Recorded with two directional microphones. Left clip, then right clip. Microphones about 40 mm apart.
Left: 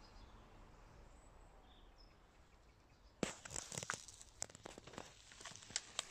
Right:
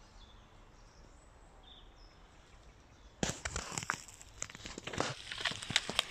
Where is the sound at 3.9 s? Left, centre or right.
Right.